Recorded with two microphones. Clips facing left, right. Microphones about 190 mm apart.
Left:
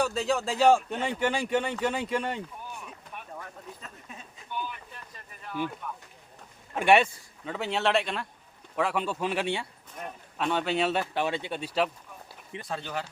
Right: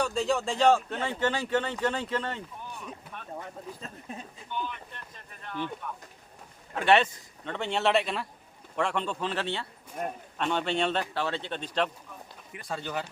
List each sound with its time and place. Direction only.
0.0 s speech: centre (ahead or behind)
3.3 s speech: 25° right (ahead or behind)
4.5 s speech: 5° left (ahead or behind)
10.3 s speech: 5° left (ahead or behind)